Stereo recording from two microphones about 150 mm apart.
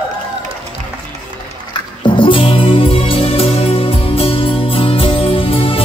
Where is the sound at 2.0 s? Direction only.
35° left (ahead or behind).